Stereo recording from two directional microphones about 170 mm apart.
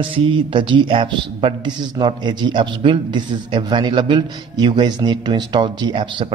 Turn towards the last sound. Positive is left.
turn(degrees=-30)  # may be behind; listen again after turning